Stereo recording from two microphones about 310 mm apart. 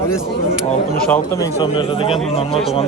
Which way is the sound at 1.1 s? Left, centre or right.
Centre.